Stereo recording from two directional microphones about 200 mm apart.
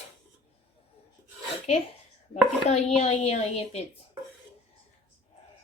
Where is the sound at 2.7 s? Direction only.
35° left (ahead or behind).